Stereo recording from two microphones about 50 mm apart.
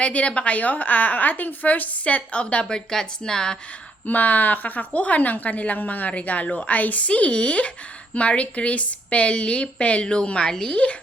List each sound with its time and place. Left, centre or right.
0.0 s a woman's voice: left
4.0 s a woman's voice: left; by 10.8 s centre